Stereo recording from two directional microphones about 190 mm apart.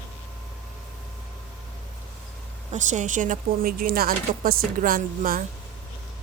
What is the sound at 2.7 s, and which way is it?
Speech, 40° right (ahead or behind).